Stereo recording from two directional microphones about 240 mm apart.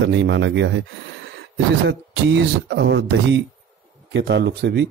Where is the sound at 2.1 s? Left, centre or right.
Right.